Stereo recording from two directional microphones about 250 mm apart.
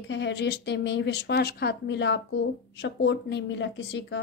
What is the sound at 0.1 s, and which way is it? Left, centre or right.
A woman's voice, left.